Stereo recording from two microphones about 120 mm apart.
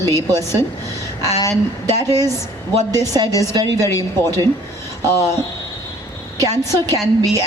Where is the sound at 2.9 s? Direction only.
30° right (ahead or behind).